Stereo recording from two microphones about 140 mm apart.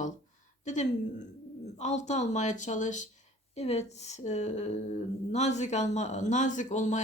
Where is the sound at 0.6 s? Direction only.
60° left (ahead or behind).